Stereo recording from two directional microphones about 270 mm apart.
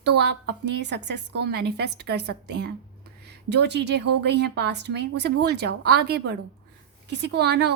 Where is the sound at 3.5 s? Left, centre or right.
Right.